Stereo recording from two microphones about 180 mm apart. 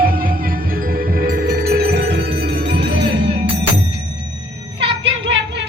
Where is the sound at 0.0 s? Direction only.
55° right (ahead or behind).